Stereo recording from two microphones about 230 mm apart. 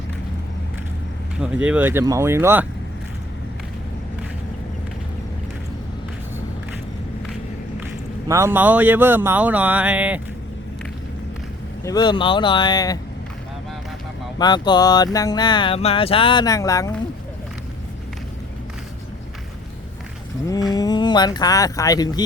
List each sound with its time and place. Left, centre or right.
1.4 s speech: centre
8.3 s speech: centre
11.8 s speech: centre
14.3 s speech: centre
20.7 s speech: centre